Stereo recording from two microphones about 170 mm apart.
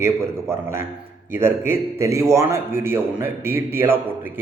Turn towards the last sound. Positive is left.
turn(degrees=-15)  # may be behind; listen again after turning